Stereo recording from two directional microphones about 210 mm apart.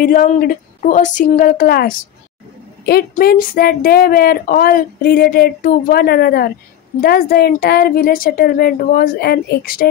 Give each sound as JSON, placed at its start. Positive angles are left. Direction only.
{"t": 0.0, "sound": "a woman's voice", "side_deg": 40}